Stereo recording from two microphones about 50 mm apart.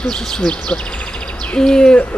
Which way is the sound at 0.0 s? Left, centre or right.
Centre.